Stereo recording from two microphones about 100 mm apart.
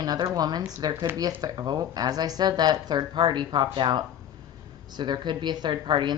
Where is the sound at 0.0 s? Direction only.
40° right (ahead or behind).